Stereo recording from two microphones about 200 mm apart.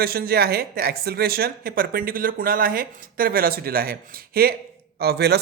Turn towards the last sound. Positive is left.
turn(degrees=-55)  # may be behind; listen again after turning